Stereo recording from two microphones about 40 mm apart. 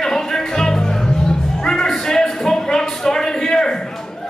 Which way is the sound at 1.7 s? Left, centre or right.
Centre.